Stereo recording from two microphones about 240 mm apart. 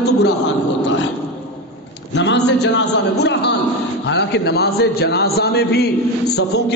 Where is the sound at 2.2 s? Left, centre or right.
Left.